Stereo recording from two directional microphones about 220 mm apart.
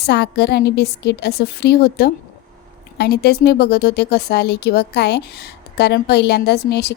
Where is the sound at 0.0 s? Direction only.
50° left (ahead or behind).